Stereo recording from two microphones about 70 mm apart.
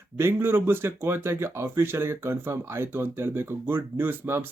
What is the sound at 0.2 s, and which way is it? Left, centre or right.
Speech, right.